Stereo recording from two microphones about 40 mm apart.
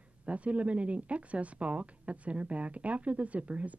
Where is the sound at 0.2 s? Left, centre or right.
Right.